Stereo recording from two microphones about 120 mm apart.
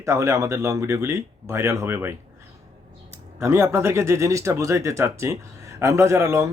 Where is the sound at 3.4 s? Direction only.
20° right (ahead or behind).